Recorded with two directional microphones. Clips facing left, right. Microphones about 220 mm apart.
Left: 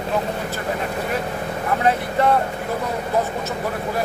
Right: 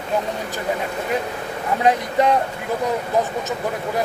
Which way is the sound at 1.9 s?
15° right (ahead or behind).